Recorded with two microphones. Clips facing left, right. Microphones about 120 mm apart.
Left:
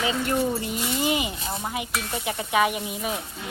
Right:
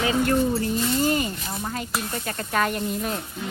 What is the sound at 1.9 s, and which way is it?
Stir, 5° left (ahead or behind).